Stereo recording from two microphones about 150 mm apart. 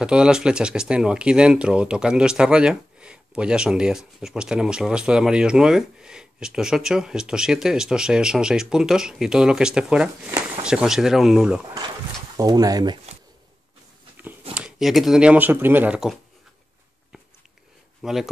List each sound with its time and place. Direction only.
0.0 s speech: 5° right (ahead or behind)
12.4 s speech: 25° right (ahead or behind)
14.5 s speech: 5° right (ahead or behind)
18.0 s speech: centre (ahead or behind)